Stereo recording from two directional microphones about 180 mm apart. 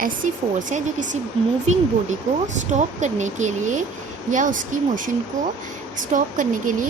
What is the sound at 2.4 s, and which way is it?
Speech, 40° right (ahead or behind).